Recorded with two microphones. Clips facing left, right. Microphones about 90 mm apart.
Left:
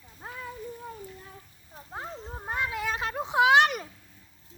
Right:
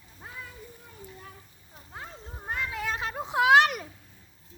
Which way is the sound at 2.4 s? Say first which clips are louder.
Left 2 dB; 15° left (ahead or behind).